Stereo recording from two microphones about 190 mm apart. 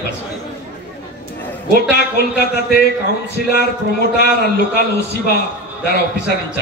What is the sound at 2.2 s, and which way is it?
A man's voice, 55° left (ahead or behind).